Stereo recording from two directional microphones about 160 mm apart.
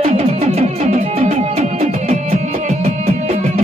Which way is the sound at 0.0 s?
40° right (ahead or behind).